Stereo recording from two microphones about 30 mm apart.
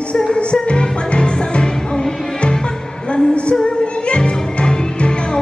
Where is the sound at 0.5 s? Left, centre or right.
Left.